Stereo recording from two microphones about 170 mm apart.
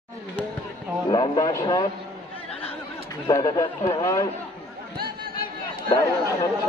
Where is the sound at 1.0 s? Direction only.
25° left (ahead or behind).